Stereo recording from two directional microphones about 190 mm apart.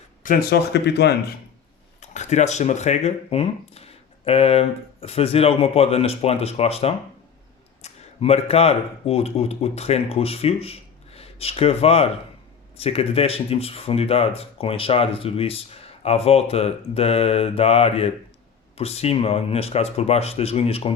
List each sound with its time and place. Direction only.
0.2 s speech: 50° left (ahead or behind)
2.0 s speech: 40° left (ahead or behind)